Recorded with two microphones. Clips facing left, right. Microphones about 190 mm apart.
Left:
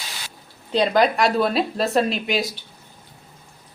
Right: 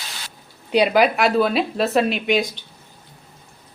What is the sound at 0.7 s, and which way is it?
Speech, 10° right (ahead or behind).